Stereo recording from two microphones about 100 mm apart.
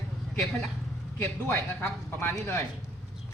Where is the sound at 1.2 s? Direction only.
20° left (ahead or behind).